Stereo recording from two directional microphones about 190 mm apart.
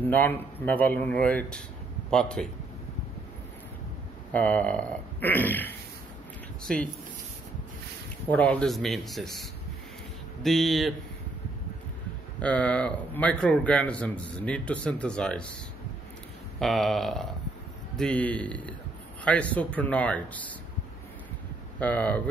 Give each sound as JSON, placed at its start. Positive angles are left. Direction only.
{"t": 0.0, "sound": "a man's voice", "side_deg": 10}
{"t": 4.3, "sound": "a man's voice", "side_deg": 5}
{"t": 8.3, "sound": "speech", "side_deg": 5}
{"t": 12.4, "sound": "a man's voice", "side_deg": 5}
{"t": 16.5, "sound": "a man's voice", "side_deg": 0}
{"t": 21.7, "sound": "a man's voice", "side_deg": 10}